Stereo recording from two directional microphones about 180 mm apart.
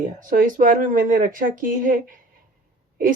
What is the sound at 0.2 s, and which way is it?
Speech, 50° right (ahead or behind).